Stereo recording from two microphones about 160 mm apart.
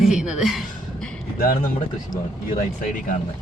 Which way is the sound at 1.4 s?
65° left (ahead or behind).